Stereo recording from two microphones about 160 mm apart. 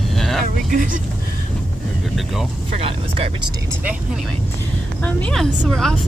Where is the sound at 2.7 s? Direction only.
35° right (ahead or behind).